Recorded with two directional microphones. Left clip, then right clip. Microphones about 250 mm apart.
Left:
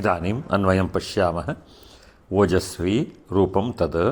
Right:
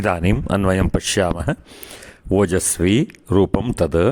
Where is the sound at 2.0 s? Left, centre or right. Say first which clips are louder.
Right 2 dB; right.